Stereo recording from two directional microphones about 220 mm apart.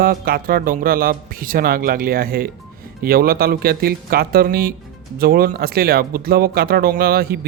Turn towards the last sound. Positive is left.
turn(degrees=-45)  # may be behind; listen again after turning